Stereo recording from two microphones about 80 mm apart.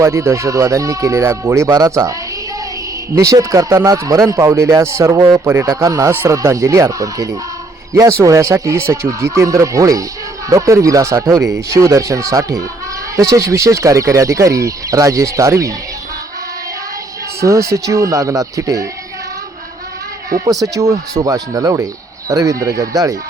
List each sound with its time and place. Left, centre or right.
0.0 s speech: right
1.7 s speech: right
3.2 s speech: right
5.6 s speech: right
17.4 s speech: right
20.5 s speech: right